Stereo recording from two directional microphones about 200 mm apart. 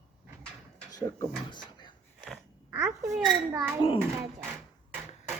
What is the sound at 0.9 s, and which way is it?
Speech, 20° left (ahead or behind).